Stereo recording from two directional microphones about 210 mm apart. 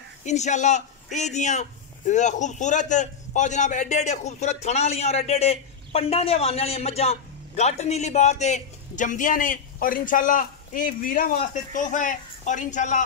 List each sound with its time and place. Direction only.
0.2 s a man's voice: 35° left (ahead or behind)